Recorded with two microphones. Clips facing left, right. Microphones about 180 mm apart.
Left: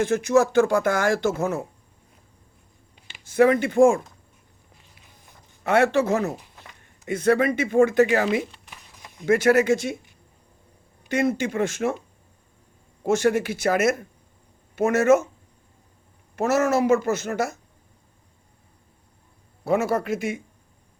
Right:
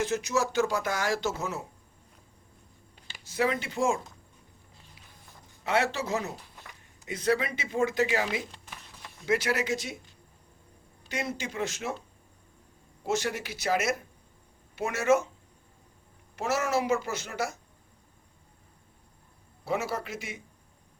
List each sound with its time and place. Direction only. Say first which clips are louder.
0.0 s speech: left 9 dB; 55° left (ahead or behind)
3.2 s speech: left 11 dB; 55° left (ahead or behind)
5.6 s speech: left 9 dB; 50° left (ahead or behind)
9.0 s a sound: left 2 dB; 15° left (ahead or behind)
9.2 s speech: left 10 dB; 50° left (ahead or behind)
11.1 s speech: left 11 dB; 55° left (ahead or behind)
13.1 s speech: left 10 dB; 50° left (ahead or behind)
16.3 s speech: left 7 dB; 45° left (ahead or behind)
19.6 s speech: left 9 dB; 50° left (ahead or behind)